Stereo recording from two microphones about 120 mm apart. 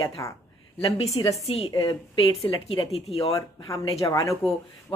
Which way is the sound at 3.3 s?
25° left (ahead or behind).